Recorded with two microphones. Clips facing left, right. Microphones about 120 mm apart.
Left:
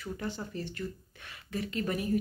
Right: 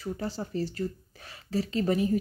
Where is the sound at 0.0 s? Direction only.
35° right (ahead or behind).